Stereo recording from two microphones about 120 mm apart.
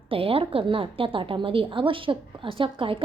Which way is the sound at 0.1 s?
50° right (ahead or behind).